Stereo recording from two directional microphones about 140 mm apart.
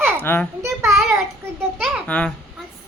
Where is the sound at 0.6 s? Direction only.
20° right (ahead or behind).